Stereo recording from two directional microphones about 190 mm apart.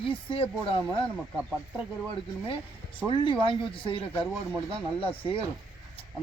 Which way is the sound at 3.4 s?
25° left (ahead or behind).